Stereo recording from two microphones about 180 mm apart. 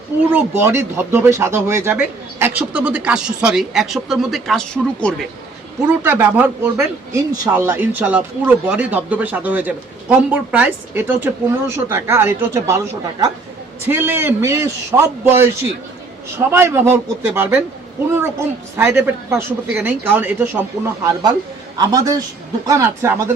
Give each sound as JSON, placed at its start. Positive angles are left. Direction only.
{"t": 0.3, "sound": "speech", "side_deg": -10}
{"t": 6.0, "sound": "speech", "side_deg": -10}
{"t": 16.5, "sound": "a man's voice", "side_deg": -15}